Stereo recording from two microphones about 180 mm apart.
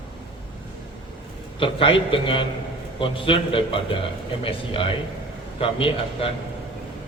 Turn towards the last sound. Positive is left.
turn(degrees=30)  # may be behind; listen again after turning